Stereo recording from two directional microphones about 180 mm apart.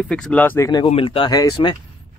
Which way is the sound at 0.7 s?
25° left (ahead or behind).